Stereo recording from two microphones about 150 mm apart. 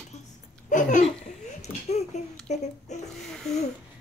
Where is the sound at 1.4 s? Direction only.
50° left (ahead or behind).